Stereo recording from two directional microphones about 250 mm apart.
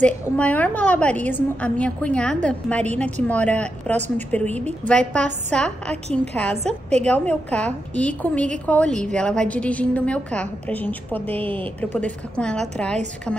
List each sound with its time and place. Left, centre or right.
0.0 s a woman's voice: centre
6.5 s a woman's voice: right
7.1 s a woman's voice: centre